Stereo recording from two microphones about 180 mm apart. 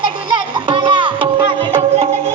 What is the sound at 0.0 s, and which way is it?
Music, 30° right (ahead or behind).